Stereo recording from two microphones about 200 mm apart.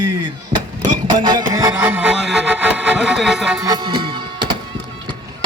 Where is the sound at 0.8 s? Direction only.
20° right (ahead or behind).